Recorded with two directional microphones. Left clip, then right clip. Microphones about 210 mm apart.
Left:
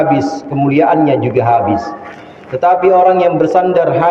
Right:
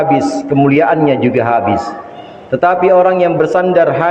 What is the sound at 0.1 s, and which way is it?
A man's voice, 45° right (ahead or behind).